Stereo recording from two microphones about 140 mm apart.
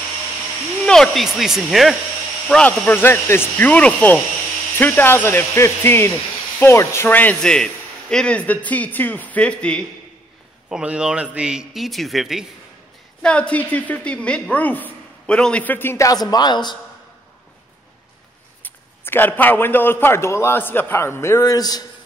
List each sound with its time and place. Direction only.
0.8 s a man's voice: 5° left (ahead or behind)
10.7 s a man's voice: 5° right (ahead or behind); by 16.7 s 30° left (ahead or behind)
18.6 s a woman's voice: 15° left (ahead or behind)